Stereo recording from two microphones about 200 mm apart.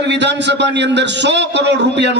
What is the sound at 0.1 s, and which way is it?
A man's voice, 60° right (ahead or behind).